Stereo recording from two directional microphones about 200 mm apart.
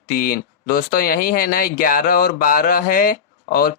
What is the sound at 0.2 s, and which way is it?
Speech, 50° left (ahead or behind).